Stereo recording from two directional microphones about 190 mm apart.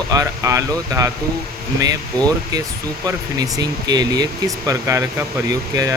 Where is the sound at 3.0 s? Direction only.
20° right (ahead or behind).